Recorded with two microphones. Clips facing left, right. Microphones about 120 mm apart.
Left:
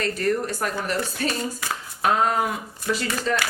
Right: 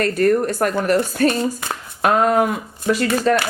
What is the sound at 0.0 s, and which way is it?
A woman's voice, 55° right (ahead or behind).